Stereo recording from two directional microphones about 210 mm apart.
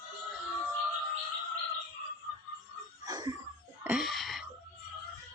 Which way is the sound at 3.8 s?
Centre (ahead or behind).